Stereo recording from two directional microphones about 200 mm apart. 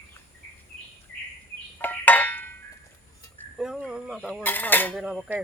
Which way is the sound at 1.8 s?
10° left (ahead or behind).